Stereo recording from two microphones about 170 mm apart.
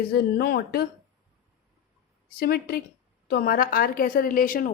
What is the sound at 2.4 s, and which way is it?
A woman's voice, 65° left (ahead or behind).